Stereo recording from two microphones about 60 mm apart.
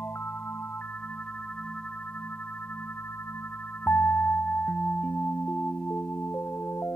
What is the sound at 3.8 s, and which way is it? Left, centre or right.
Music, left.